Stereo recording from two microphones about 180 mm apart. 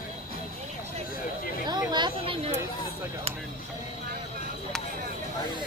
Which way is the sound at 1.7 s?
25° right (ahead or behind).